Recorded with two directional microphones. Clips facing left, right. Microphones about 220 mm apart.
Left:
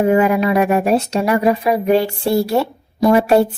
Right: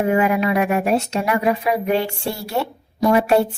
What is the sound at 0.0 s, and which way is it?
Speech, 35° left (ahead or behind).